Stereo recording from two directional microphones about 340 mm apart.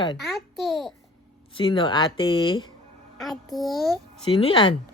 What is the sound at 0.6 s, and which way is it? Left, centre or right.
Speech, centre.